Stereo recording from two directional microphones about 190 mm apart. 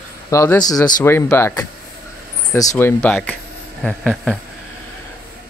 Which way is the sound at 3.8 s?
5° left (ahead or behind).